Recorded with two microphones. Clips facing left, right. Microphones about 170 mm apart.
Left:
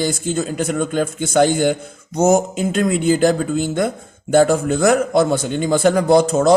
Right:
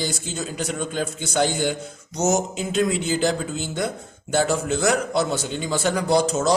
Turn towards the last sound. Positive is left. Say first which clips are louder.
# left 6 dB
turn(degrees=55)  # may be behind; listen again after turning